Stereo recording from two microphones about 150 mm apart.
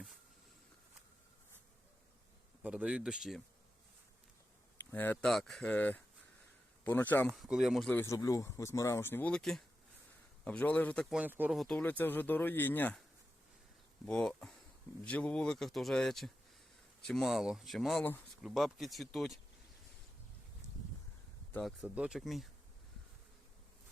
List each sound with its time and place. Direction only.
2.6 s speech: 10° right (ahead or behind)
4.9 s speech: 10° left (ahead or behind)
5.1 s speech: centre (ahead or behind)
7.3 s speech: 5° right (ahead or behind)
7.9 s speech: 15° left (ahead or behind)
11.1 s speech: 10° right (ahead or behind)
11.5 s speech: centre (ahead or behind)
11.8 s speech: 10° left (ahead or behind)
14.0 s speech: 5° left (ahead or behind)
21.5 s speech: centre (ahead or behind)